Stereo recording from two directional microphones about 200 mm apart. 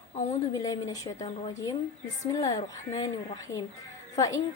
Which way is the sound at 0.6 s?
20° left (ahead or behind).